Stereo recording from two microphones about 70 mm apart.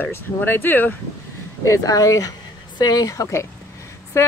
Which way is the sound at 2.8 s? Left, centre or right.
Left.